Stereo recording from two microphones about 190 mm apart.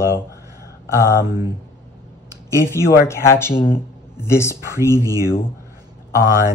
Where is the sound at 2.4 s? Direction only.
15° left (ahead or behind).